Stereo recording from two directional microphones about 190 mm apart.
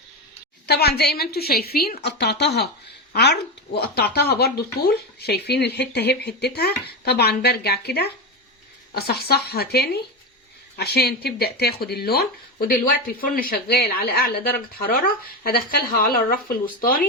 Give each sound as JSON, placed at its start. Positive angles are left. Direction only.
{"t": 0.7, "sound": "speech", "side_deg": 55}